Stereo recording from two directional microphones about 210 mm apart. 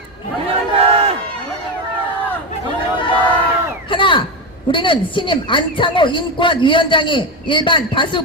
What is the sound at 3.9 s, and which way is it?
A man's voice, 25° left (ahead or behind).